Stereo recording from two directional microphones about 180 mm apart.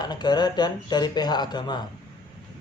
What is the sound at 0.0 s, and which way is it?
A man's voice, 25° left (ahead or behind).